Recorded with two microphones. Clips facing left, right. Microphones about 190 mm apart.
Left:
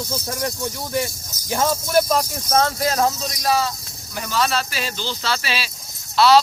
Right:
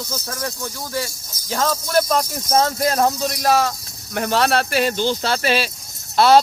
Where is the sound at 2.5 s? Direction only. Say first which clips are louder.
Right 1 dB; 40° right (ahead or behind).